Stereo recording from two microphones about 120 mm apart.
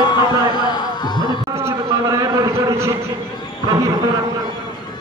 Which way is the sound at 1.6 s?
25° right (ahead or behind).